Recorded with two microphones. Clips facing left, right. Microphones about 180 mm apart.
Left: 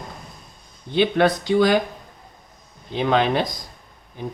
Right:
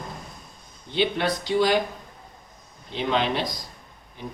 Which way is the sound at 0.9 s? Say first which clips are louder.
Left 6 dB; 50° left (ahead or behind).